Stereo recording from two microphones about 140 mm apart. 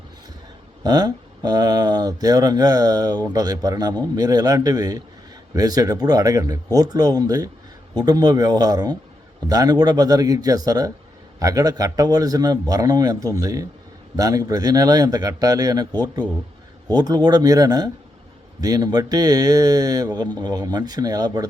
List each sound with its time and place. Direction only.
0.8 s speech: 25° right (ahead or behind)